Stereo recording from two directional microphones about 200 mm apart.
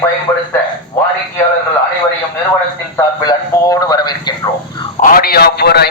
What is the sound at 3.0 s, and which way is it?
A man's voice, 15° left (ahead or behind).